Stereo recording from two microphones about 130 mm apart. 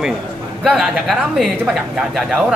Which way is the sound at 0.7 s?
5° right (ahead or behind).